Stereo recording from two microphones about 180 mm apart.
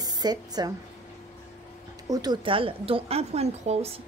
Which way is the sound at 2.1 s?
20° right (ahead or behind).